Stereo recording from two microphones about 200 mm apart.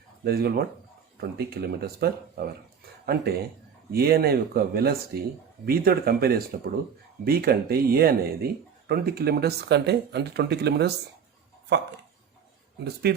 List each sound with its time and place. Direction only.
0.3 s speech: 50° right (ahead or behind)
12.8 s speech: 55° right (ahead or behind)